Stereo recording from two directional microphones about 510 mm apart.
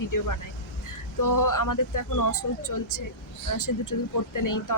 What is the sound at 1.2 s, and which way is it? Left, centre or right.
A woman's voice, left.